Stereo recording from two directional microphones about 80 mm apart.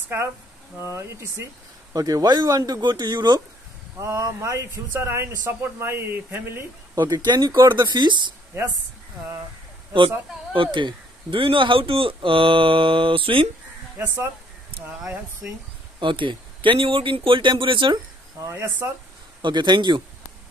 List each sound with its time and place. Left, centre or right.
0.7 s speech: right
2.0 s speech: right
4.0 s speech: right
7.2 s speech: right
9.9 s speech: right
13.9 s speech: right
14.9 s speech: centre
16.0 s speech: right
18.4 s speech: right
19.4 s speech: right